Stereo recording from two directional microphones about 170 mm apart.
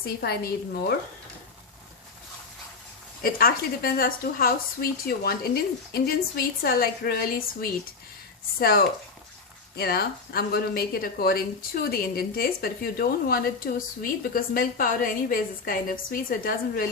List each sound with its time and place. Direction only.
0.0 s a woman's voice: 65° left (ahead or behind)
3.2 s speech: 60° left (ahead or behind)